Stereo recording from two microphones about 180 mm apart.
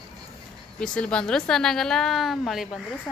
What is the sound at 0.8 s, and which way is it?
A woman's voice, 5° left (ahead or behind).